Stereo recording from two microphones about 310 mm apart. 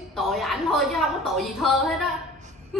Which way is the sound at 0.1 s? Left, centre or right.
Centre.